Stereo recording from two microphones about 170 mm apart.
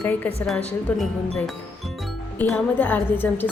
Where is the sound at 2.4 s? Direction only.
10° left (ahead or behind).